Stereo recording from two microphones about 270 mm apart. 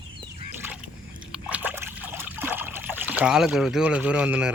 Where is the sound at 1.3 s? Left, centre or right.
Centre.